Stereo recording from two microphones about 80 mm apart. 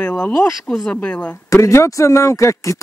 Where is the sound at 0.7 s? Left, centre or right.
Centre.